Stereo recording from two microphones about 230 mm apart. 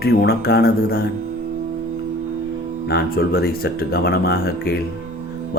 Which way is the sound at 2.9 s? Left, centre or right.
Left.